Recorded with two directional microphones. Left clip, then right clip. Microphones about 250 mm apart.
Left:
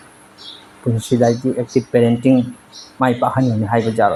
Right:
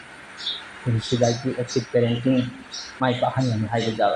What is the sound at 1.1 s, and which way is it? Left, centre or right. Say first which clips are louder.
Speech: left 6 dB; left.